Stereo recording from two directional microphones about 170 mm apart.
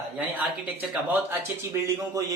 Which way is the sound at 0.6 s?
10° right (ahead or behind).